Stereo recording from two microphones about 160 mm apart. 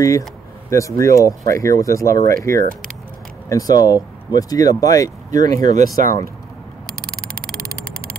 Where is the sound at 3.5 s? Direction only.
20° left (ahead or behind).